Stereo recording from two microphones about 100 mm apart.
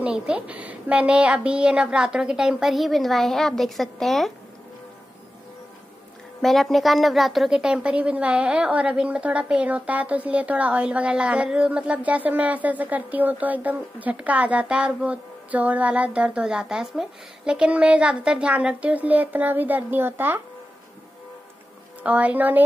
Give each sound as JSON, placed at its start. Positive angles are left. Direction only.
{"t": 0.0, "sound": "a woman's voice", "side_deg": -10}
{"t": 6.4, "sound": "a woman's voice", "side_deg": 0}
{"t": 22.0, "sound": "a woman's voice", "side_deg": -15}